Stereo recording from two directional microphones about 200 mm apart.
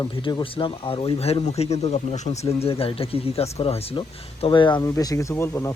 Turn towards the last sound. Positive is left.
turn(degrees=10)  # may be behind; listen again after turning